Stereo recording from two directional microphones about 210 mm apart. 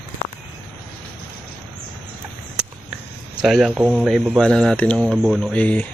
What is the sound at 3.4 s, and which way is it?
Speech, centre (ahead or behind).